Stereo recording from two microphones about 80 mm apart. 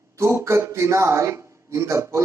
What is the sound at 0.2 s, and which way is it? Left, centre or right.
A man's voice, right.